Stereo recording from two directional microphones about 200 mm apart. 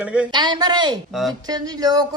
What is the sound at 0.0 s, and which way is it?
Speech, 5° right (ahead or behind).